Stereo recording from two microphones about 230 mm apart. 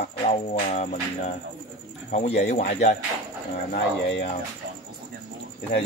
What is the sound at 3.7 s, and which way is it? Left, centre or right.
Speech, left.